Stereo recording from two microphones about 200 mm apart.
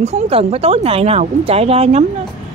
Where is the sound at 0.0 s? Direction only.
30° right (ahead or behind).